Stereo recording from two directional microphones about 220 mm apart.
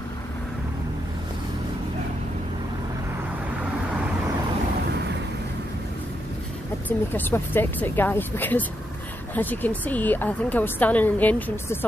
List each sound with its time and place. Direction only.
6.9 s a woman's voice: 10° left (ahead or behind)